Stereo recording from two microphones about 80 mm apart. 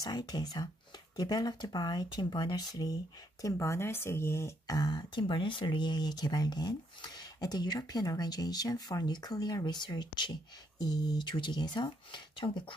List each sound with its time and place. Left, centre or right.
0.0 s speech: left
3.4 s speech: left
4.7 s speech: left
10.8 s speech: left